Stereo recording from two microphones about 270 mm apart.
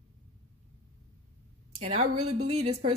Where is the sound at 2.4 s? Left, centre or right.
Right.